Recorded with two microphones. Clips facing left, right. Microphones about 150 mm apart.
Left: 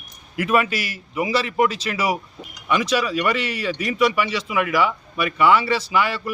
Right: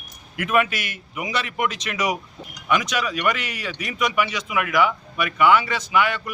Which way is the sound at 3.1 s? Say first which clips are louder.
Left 2 dB; 30° left (ahead or behind).